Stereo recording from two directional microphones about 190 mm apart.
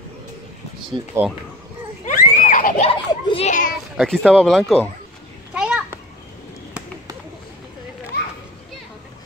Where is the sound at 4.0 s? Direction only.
5° left (ahead or behind).